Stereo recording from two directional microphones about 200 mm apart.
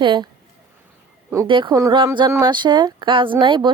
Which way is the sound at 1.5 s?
25° right (ahead or behind).